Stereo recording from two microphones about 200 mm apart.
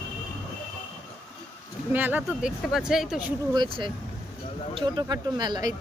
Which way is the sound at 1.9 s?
10° right (ahead or behind).